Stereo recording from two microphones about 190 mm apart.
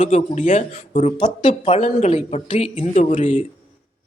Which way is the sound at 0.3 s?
40° left (ahead or behind).